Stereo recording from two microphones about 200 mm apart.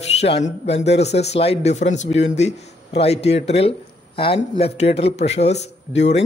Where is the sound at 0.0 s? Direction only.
30° left (ahead or behind).